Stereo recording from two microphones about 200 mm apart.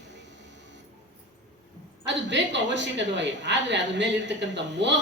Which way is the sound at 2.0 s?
65° right (ahead or behind).